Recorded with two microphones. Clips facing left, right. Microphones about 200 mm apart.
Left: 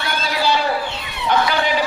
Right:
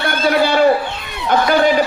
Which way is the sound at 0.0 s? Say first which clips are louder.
Right 6 dB; 55° right (ahead or behind).